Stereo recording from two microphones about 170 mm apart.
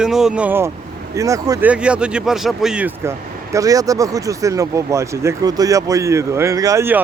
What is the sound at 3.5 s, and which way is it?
Speech, 20° right (ahead or behind).